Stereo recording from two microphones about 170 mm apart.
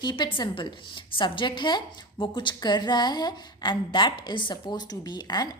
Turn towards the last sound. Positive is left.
turn(degrees=25)  # may be behind; listen again after turning